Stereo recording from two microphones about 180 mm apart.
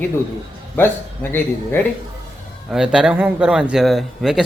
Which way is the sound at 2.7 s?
5° right (ahead or behind).